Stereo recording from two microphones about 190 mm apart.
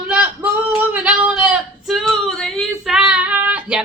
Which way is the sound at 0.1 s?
10° right (ahead or behind).